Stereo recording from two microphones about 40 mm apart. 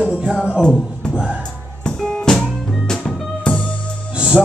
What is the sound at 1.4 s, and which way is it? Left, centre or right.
Music, centre.